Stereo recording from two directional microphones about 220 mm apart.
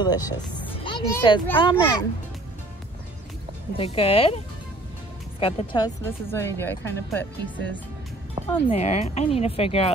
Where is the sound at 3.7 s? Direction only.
25° left (ahead or behind).